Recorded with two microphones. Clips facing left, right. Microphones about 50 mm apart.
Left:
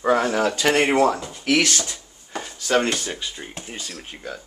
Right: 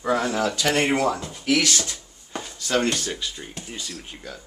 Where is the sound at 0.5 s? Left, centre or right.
Left.